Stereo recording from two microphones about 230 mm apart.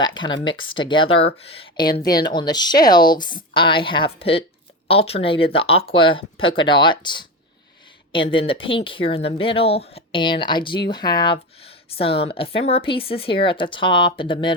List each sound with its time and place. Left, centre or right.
0.0 s speech: centre